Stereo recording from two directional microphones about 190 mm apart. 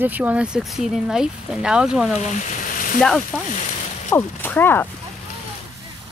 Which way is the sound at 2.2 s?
40° left (ahead or behind).